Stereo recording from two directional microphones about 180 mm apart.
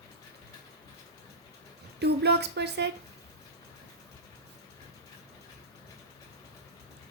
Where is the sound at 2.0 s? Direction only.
70° right (ahead or behind).